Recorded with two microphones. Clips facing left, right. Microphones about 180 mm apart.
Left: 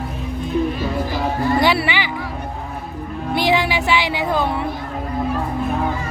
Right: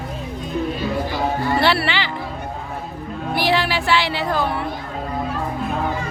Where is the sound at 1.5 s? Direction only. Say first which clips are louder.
Left 1 dB; 15° left (ahead or behind).